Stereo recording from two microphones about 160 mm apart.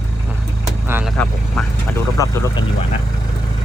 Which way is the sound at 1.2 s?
10° left (ahead or behind).